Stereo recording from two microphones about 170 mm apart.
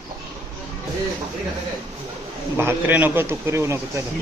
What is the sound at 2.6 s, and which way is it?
Speech, 10° right (ahead or behind).